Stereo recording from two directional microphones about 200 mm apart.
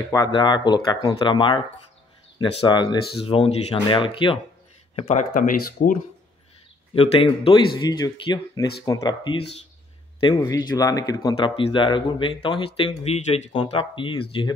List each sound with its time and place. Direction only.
0.1 s speech: 20° left (ahead or behind)
2.6 s speech: 20° left (ahead or behind); by 5.9 s 40° left (ahead or behind)
7.0 s speech: 30° left (ahead or behind)